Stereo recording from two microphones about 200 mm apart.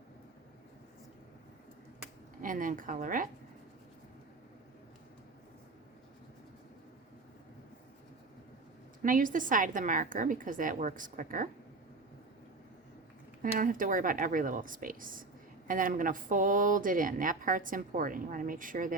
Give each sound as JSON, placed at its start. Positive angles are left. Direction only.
{"t": 2.4, "sound": "speech", "side_deg": -45}
{"t": 9.0, "sound": "a woman's voice", "side_deg": -40}
{"t": 13.4, "sound": "speech", "side_deg": -45}